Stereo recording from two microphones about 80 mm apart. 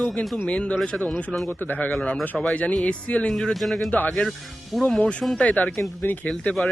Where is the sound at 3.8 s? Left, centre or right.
Left.